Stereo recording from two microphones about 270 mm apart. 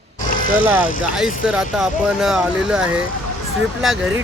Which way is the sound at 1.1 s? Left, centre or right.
Centre.